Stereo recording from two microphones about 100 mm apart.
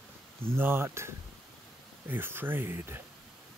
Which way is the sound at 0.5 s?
20° right (ahead or behind).